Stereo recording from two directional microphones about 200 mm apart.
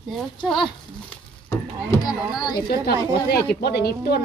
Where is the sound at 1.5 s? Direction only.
15° left (ahead or behind).